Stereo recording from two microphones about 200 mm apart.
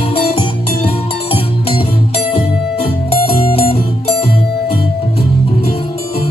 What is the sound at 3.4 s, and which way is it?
Music, 30° left (ahead or behind).